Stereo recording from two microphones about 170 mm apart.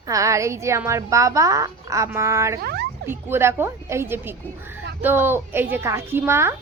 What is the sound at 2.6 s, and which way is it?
Speech, 75° right (ahead or behind).